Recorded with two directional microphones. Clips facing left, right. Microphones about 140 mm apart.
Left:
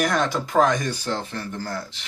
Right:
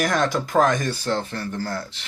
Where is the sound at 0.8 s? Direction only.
10° left (ahead or behind).